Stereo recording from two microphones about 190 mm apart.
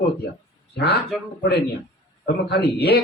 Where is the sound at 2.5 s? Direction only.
55° left (ahead or behind).